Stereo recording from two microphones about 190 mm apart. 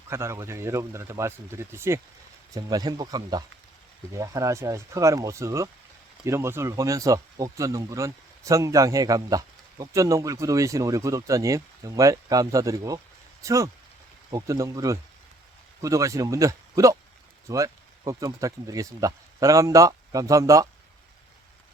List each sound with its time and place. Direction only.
0.1 s speech: 15° right (ahead or behind)